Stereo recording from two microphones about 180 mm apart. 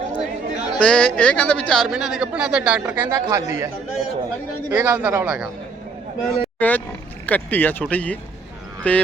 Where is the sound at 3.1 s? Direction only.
15° right (ahead or behind).